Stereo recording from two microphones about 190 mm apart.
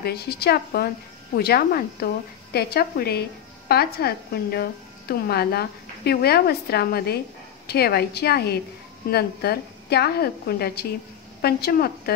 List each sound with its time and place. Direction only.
0.0 s a woman's voice: 55° left (ahead or behind)